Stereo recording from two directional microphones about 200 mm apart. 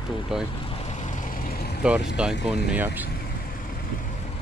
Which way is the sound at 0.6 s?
30° left (ahead or behind).